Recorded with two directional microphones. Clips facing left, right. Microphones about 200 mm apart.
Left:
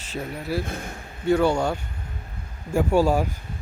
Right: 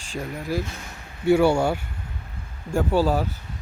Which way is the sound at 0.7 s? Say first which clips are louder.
Left 6 dB; 50° left (ahead or behind).